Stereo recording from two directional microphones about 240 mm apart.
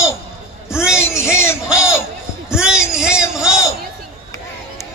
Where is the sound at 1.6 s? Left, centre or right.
Centre.